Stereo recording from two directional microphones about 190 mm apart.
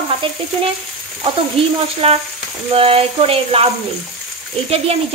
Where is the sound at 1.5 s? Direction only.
30° right (ahead or behind).